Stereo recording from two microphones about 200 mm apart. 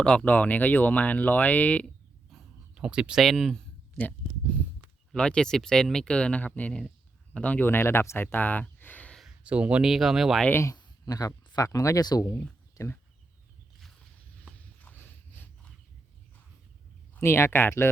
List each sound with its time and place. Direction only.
0.0 s speech: 5° left (ahead or behind)
2.3 s a sound: 5° right (ahead or behind)
5.1 s speech: 5° left (ahead or behind)
10.5 s speech: 15° left (ahead or behind)
14.8 s a sound: 10° left (ahead or behind)
17.2 s speech: 10° left (ahead or behind)